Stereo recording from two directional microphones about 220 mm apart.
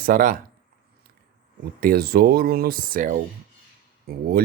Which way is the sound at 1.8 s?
45° right (ahead or behind).